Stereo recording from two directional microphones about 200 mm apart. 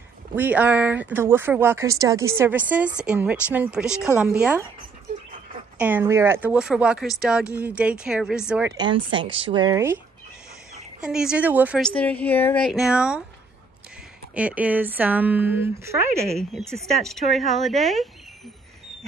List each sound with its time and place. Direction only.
0.4 s speech: 10° right (ahead or behind)
5.8 s speech: 10° right (ahead or behind)
8.7 s speech: 25° right (ahead or behind)
11.1 s speech: 5° right (ahead or behind)
11.8 s speech: 5° left (ahead or behind)
14.3 s speech: 5° right (ahead or behind)
16.3 s speech: centre (ahead or behind)